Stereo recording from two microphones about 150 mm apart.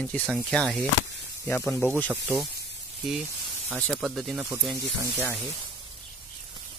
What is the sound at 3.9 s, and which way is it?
Speech, centre (ahead or behind).